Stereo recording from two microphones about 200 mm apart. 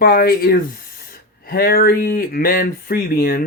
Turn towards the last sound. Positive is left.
turn(degrees=50)  # may be behind; listen again after turning